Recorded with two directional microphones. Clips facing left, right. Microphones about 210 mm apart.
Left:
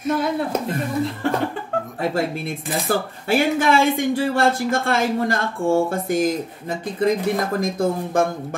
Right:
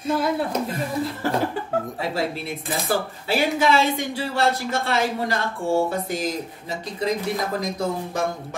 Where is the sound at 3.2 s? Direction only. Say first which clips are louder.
Left 3 dB; 50° left (ahead or behind).